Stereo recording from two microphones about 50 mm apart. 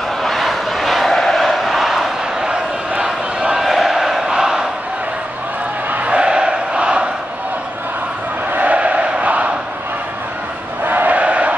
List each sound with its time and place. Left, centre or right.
0.2 s a sound: centre
2.9 s a sound: centre
3.6 s crowd: centre
6.0 s crowd: right
8.5 s crowd: right
10.9 s chant: right